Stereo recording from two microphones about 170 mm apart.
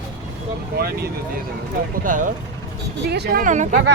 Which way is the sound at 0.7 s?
65° right (ahead or behind).